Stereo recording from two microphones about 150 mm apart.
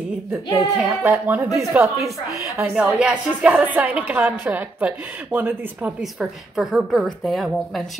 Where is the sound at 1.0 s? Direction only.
15° right (ahead or behind).